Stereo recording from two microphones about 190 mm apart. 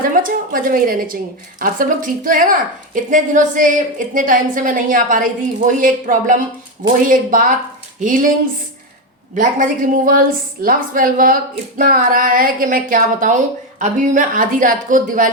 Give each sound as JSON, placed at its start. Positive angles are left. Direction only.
{"t": 0.0, "sound": "a woman's voice", "side_deg": -45}
{"t": 9.3, "sound": "a woman's voice", "side_deg": -45}